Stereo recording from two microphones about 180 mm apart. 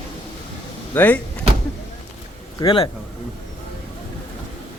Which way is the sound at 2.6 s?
25° left (ahead or behind).